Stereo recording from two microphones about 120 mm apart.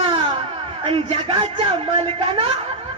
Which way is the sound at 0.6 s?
50° right (ahead or behind).